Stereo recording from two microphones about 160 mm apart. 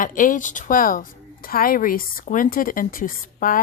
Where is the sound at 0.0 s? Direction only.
55° left (ahead or behind).